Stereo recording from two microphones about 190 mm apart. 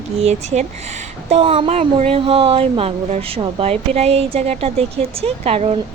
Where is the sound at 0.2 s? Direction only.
35° right (ahead or behind).